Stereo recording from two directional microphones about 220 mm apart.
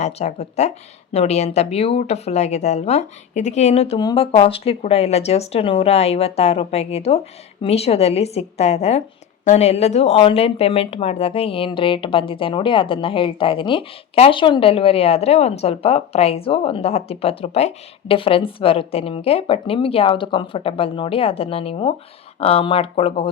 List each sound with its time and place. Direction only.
0.0 s speech: 30° left (ahead or behind)